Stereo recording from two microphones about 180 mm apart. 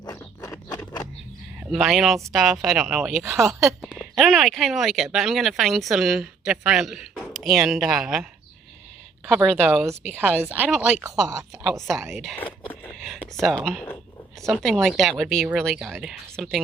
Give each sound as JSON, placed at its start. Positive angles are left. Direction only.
{"t": 0.0, "sound": "a sound", "side_deg": 20}
{"t": 1.7, "sound": "speech", "side_deg": 0}
{"t": 9.3, "sound": "a woman's voice", "side_deg": -5}